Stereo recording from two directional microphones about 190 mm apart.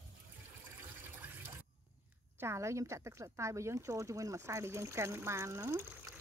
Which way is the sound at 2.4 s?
15° right (ahead or behind).